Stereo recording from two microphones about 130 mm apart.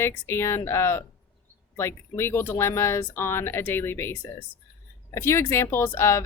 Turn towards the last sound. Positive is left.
turn(degrees=20)  # may be behind; listen again after turning